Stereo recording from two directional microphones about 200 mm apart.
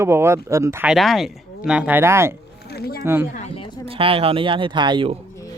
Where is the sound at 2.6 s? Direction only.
50° left (ahead or behind).